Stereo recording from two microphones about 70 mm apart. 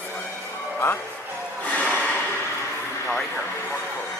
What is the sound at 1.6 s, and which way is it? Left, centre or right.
Music, centre.